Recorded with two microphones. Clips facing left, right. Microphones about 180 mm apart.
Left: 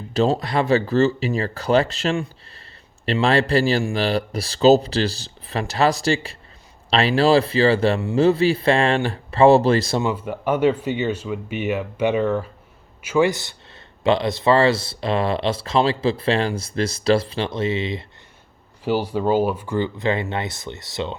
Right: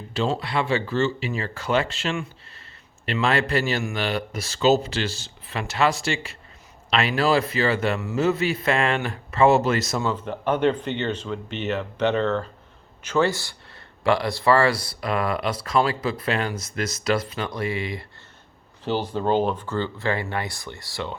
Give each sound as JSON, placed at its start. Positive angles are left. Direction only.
{"t": 0.1, "sound": "speech", "side_deg": 40}
{"t": 10.0, "sound": "a man's voice", "side_deg": 10}
{"t": 18.9, "sound": "speech", "side_deg": 10}